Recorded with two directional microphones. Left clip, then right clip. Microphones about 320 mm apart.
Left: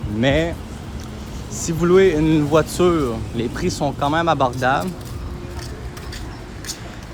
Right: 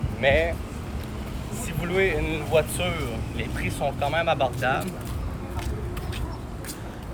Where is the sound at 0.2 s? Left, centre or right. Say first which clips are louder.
Left 2 dB; left.